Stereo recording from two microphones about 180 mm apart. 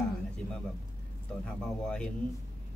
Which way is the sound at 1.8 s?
5° left (ahead or behind).